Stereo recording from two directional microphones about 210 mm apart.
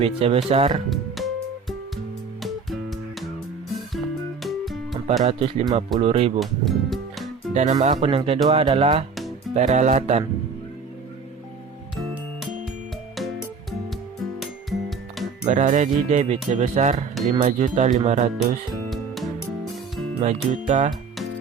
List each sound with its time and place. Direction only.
0.0 s speech: 30° right (ahead or behind)
0.9 s music: centre (ahead or behind)
2.4 s music: centre (ahead or behind)
4.4 s music: centre (ahead or behind)
5.2 s speech: 30° right (ahead or behind)
6.4 s music: centre (ahead or behind)
7.5 s speech: 35° right (ahead or behind)
11.9 s music: centre (ahead or behind)
15.4 s speech: 35° right (ahead or behind)
18.9 s music: centre (ahead or behind)
20.1 s speech: 35° right (ahead or behind)